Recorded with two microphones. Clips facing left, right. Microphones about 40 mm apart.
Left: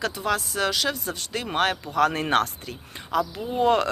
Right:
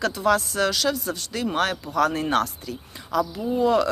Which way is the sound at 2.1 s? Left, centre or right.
Left.